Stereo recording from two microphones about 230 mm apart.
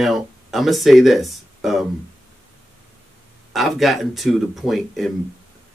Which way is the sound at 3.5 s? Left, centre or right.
Centre.